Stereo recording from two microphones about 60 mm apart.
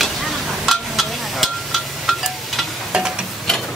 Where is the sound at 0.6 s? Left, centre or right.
Centre.